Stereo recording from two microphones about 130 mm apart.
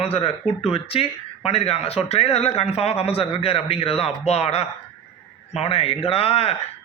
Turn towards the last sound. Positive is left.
turn(degrees=50)  # may be behind; listen again after turning